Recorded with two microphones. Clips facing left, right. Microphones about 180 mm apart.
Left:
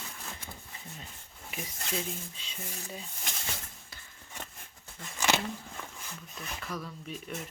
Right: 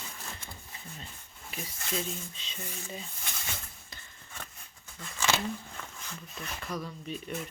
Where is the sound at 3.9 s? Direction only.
5° left (ahead or behind).